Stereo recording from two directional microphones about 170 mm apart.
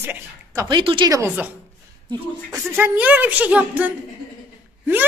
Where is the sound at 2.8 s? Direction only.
10° right (ahead or behind).